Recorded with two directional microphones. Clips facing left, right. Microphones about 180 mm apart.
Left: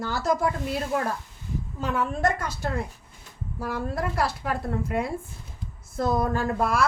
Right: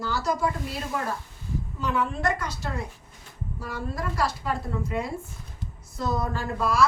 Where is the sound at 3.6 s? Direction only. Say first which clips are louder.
Left 4 dB; 60° left (ahead or behind).